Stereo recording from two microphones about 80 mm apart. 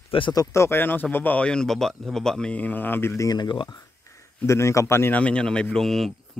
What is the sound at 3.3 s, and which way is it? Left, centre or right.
Speech, left.